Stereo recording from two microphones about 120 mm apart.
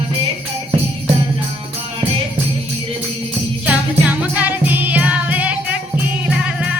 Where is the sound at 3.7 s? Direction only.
10° right (ahead or behind).